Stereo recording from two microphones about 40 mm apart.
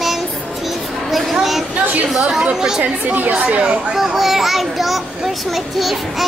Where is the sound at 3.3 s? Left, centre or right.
Right.